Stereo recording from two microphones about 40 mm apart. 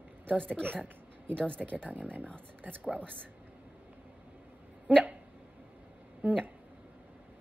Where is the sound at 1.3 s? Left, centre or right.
Left.